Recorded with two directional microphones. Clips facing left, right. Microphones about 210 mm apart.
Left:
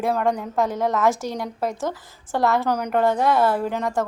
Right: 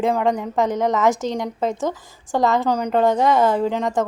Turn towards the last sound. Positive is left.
turn(degrees=-20)  # may be behind; listen again after turning